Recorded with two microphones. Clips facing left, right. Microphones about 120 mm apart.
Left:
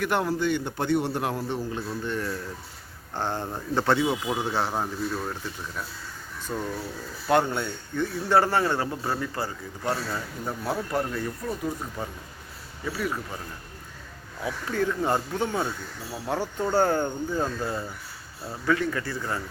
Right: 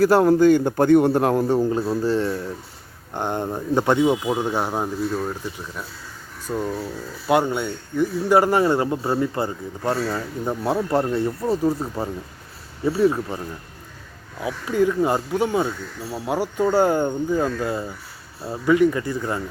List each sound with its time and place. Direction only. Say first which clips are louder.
0.0 s a man's voice: right 11 dB; 35° right (ahead or behind)
3.2 s speech: right 5 dB; 15° right (ahead or behind)
6.5 s speech: right 6 dB; 10° right (ahead or behind); by 13.4 s 30° right (ahead or behind)
14.4 s speech: right 7 dB; 15° right (ahead or behind)